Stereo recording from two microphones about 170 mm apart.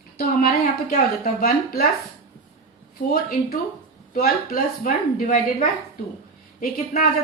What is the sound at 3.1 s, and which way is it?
A woman's voice, 60° left (ahead or behind).